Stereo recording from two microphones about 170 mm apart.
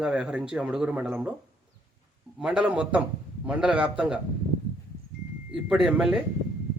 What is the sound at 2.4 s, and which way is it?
A man's voice, 5° right (ahead or behind).